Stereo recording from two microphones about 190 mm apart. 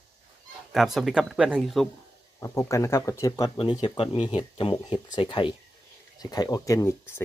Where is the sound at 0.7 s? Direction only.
Centre (ahead or behind).